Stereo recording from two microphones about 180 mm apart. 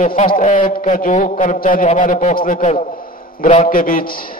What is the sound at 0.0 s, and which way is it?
A man's voice, 45° left (ahead or behind).